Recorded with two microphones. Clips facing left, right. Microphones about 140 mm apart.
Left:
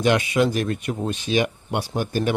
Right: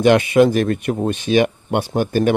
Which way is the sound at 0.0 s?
55° right (ahead or behind).